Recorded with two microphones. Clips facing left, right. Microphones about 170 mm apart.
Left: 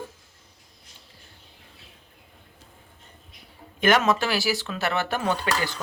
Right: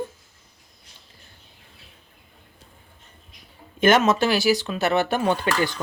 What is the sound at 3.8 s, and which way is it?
A woman's voice, 25° right (ahead or behind).